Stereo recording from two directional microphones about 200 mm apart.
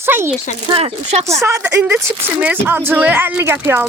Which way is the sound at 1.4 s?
15° right (ahead or behind).